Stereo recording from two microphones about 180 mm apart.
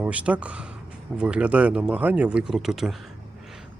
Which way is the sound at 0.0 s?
5° right (ahead or behind).